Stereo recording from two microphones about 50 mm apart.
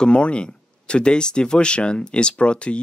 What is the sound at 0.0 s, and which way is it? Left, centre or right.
Speech, left.